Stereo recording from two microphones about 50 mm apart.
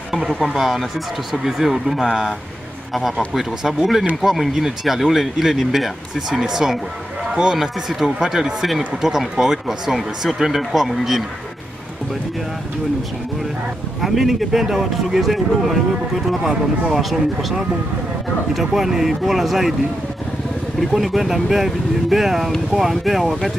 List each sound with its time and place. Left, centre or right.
0.1 s speech: centre
2.9 s a man's voice: centre
7.5 s speech: centre
14.0 s speech: centre
20.8 s speech: centre